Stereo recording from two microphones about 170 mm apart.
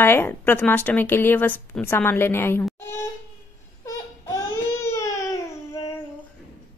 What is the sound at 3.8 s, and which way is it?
Baby cry, 15° left (ahead or behind).